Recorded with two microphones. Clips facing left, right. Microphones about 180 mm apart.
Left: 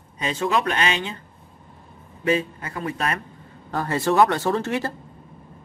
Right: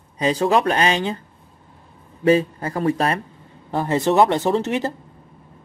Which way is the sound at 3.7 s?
20° right (ahead or behind).